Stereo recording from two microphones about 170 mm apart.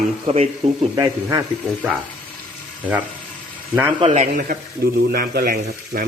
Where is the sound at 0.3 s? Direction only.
35° right (ahead or behind).